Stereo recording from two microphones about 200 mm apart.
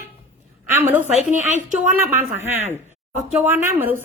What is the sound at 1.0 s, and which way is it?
Speech, 35° right (ahead or behind).